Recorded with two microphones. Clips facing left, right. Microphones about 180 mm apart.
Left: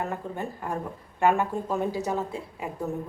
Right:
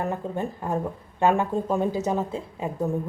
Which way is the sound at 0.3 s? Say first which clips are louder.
Right 4 dB; 20° right (ahead or behind).